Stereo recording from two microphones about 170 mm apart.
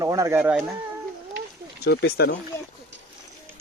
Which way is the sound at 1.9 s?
70° left (ahead or behind).